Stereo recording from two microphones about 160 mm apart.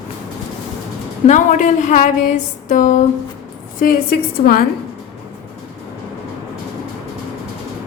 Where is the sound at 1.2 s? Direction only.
50° left (ahead or behind).